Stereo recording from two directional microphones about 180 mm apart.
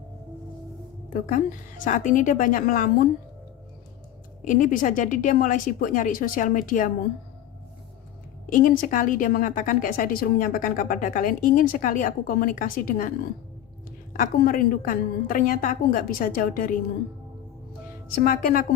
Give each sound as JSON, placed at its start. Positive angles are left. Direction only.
{"t": 1.3, "sound": "a woman's voice", "side_deg": 45}
{"t": 4.4, "sound": "a woman's voice", "side_deg": 45}
{"t": 8.4, "sound": "a woman's voice", "side_deg": 50}
{"t": 14.1, "sound": "a woman's voice", "side_deg": 50}
{"t": 18.1, "sound": "a woman's voice", "side_deg": 50}